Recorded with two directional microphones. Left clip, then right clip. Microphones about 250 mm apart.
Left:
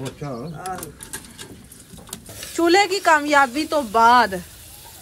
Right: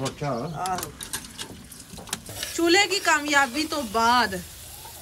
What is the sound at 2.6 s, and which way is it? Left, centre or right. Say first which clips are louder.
Speech: left 4 dB; centre.